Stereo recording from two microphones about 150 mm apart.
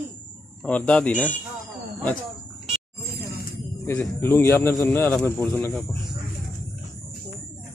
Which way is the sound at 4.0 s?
15° left (ahead or behind).